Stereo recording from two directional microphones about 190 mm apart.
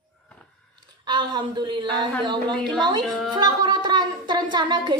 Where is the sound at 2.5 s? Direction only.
5° left (ahead or behind).